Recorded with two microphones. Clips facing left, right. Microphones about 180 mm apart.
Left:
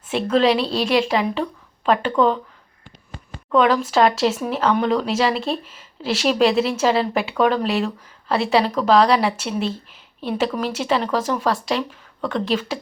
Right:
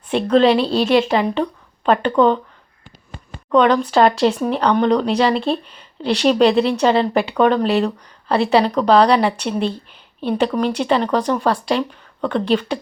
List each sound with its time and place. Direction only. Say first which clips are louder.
0.1 s speech: right 4 dB; 5° left (ahead or behind)
3.5 s speech: right 3 dB; 5° left (ahead or behind)